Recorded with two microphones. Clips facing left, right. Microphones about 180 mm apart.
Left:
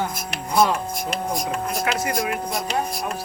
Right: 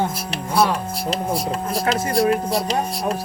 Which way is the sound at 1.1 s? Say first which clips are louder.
Right 3 dB; 35° right (ahead or behind).